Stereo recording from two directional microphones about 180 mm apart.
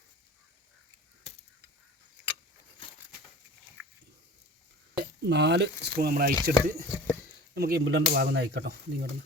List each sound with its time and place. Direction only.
4.9 s speech: 65° right (ahead or behind)